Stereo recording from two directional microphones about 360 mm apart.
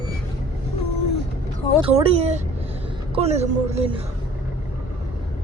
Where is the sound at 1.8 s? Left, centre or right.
Centre.